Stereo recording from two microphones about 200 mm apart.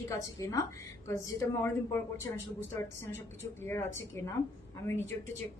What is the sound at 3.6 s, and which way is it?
Speech, 10° left (ahead or behind).